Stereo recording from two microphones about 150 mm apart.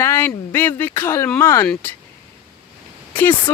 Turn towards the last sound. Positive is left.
turn(degrees=15)  # may be behind; listen again after turning